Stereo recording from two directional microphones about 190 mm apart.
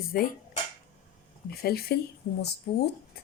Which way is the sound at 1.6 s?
55° left (ahead or behind).